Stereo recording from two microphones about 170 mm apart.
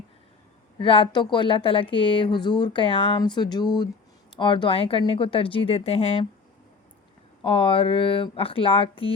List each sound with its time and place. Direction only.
0.8 s speech: 30° left (ahead or behind)
7.4 s speech: 30° left (ahead or behind)